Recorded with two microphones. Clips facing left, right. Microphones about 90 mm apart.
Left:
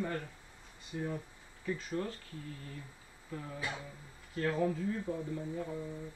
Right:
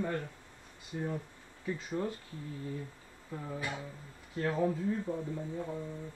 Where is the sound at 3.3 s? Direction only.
15° right (ahead or behind).